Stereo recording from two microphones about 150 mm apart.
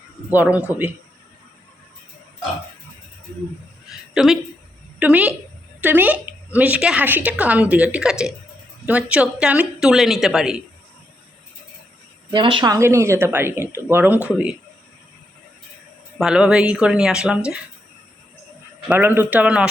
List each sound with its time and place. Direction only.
0.3 s a woman's voice: 10° right (ahead or behind)
4.1 s a woman's voice: 5° right (ahead or behind)
12.3 s a woman's voice: 35° right (ahead or behind); by 14.3 s 10° right (ahead or behind)
16.1 s a woman's voice: 5° right (ahead or behind)
18.9 s a woman's voice: 15° right (ahead or behind)